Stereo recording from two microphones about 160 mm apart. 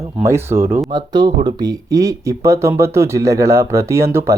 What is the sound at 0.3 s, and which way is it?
Speech, 15° right (ahead or behind).